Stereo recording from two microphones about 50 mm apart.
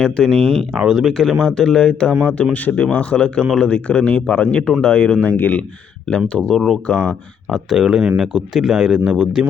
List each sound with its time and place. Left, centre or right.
0.2 s speech: centre
0.9 s speech: centre
1.1 s speech: centre
2.4 s speech: left
5.2 s speech: left
6.1 s speech: centre
6.8 s speech: left
7.5 s speech: centre